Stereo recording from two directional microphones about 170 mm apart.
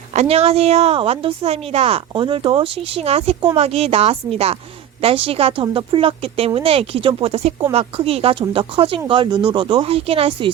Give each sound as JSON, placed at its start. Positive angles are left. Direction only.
{"t": 0.1, "sound": "a woman's voice", "side_deg": -40}